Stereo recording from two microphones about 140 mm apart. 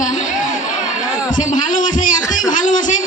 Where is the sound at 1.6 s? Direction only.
70° left (ahead or behind).